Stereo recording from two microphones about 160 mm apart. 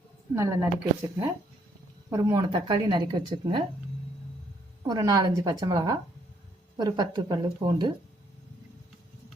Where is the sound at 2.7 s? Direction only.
30° right (ahead or behind).